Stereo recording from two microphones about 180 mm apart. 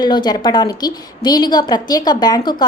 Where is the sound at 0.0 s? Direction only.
25° left (ahead or behind).